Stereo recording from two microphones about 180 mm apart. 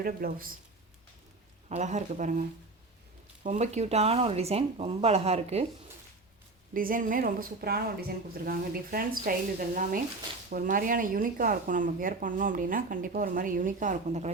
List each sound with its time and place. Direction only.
0.0 s speech: 55° right (ahead or behind)
1.7 s a woman's voice: 40° right (ahead or behind)
3.4 s a woman's voice: 40° right (ahead or behind)
6.7 s speech: 50° right (ahead or behind)